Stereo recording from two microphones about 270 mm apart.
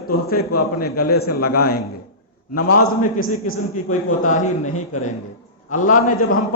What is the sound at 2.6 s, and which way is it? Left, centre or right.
Speech, left.